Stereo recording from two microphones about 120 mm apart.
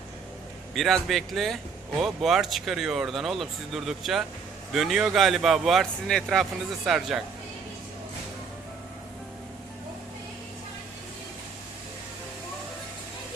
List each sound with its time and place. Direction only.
0.7 s speech: centre (ahead or behind)